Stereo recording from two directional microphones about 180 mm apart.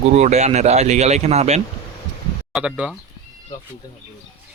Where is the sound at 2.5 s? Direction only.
5° right (ahead or behind).